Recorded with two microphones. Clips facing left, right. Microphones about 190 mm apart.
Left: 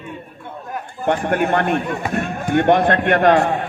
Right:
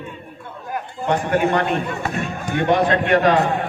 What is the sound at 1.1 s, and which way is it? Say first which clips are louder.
Speech: left 1 dB; 55° left (ahead or behind).